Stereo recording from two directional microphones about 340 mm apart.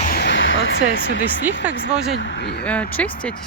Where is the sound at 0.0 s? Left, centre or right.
Left.